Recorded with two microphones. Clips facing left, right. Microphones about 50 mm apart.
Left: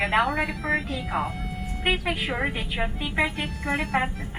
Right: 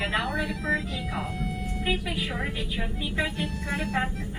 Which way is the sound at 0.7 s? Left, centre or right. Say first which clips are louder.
Left 1 dB; left.